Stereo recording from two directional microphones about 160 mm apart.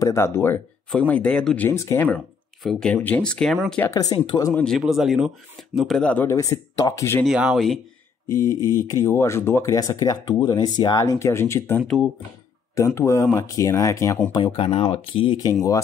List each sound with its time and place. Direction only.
0.0 s speech: 15° left (ahead or behind)
3.9 s speech: 25° left (ahead or behind)
4.6 s speech: centre (ahead or behind); by 7.2 s 20° left (ahead or behind)
7.2 s speech: 5° right (ahead or behind)
8.3 s speech: 20° left (ahead or behind)
11.8 s speech: centre (ahead or behind)
12.7 s speech: 20° left (ahead or behind)
14.3 s speech: 35° left (ahead or behind)